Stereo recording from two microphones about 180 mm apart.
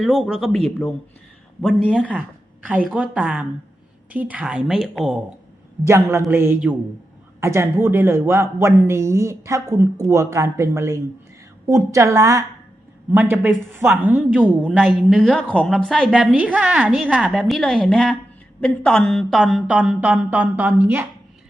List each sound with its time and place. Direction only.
0.0 s a woman's voice: centre (ahead or behind)
5.8 s a man's voice: 15° right (ahead or behind)